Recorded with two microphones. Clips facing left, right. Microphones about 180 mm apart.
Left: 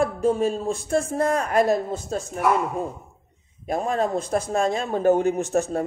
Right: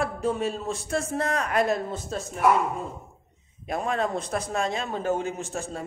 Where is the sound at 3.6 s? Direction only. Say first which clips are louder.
Left 3 dB; 45° left (ahead or behind).